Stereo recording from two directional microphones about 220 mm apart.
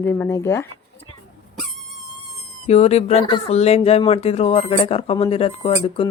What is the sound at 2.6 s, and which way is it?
Speech, 30° left (ahead or behind).